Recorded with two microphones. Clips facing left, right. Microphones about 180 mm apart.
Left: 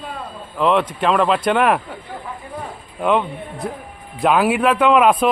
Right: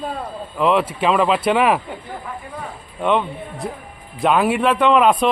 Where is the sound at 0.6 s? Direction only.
5° right (ahead or behind).